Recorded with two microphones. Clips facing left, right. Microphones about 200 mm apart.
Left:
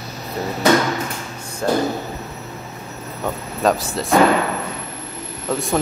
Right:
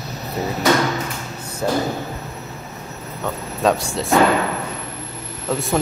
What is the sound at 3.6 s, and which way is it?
Speech, centre (ahead or behind).